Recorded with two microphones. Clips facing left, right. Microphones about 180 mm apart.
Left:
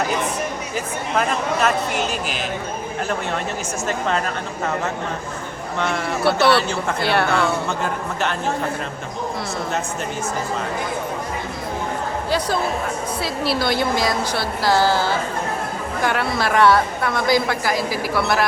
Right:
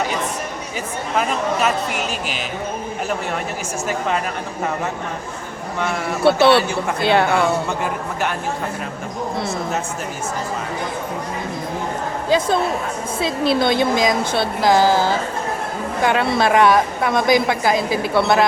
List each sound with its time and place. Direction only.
6.2 s a woman's voice: 25° right (ahead or behind)
13.1 s a woman's voice: 20° right (ahead or behind)